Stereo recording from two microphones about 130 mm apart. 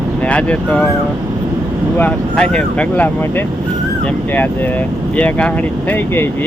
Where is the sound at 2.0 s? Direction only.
10° left (ahead or behind).